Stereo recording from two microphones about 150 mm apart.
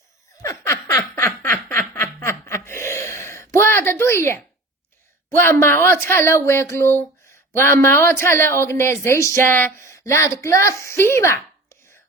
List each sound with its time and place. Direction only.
0.4 s laughter: 20° left (ahead or behind)
1.1 s snicker: 15° left (ahead or behind)
5.3 s a woman's voice: 15° left (ahead or behind)